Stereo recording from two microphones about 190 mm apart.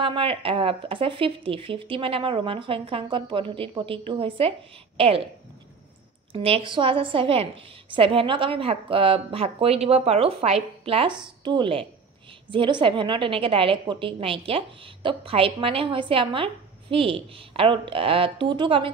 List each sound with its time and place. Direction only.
0.0 s speech: 30° right (ahead or behind)
6.3 s speech: 30° right (ahead or behind)